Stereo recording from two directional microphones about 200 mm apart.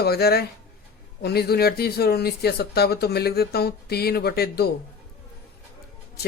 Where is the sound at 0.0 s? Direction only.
50° left (ahead or behind).